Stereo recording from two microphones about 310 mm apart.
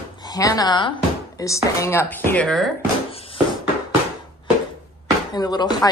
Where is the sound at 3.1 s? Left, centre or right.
Centre.